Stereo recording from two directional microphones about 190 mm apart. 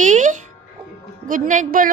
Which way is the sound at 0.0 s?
40° right (ahead or behind).